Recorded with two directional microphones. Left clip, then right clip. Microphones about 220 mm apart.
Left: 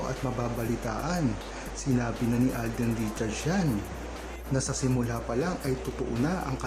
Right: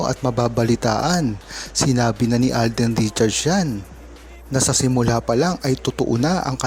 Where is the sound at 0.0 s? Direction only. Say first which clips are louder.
Right 12 dB; 40° right (ahead or behind).